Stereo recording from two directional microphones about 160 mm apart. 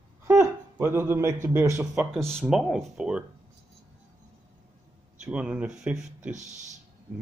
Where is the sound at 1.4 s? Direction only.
15° right (ahead or behind).